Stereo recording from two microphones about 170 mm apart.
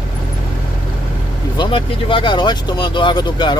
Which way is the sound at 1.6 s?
30° left (ahead or behind).